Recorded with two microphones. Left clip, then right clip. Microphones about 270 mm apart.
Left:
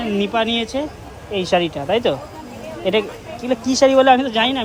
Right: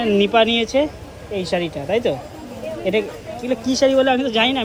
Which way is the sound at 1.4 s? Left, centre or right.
Left.